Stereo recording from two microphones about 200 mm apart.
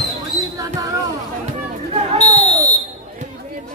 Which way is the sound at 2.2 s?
35° left (ahead or behind).